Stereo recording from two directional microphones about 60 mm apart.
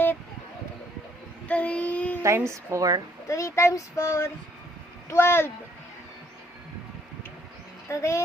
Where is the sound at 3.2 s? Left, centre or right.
Left.